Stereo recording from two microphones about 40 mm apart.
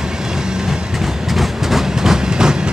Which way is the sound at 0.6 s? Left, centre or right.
Centre.